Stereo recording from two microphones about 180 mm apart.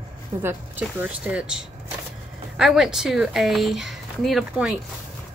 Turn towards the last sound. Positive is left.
turn(degrees=0)  # may be behind; listen again after turning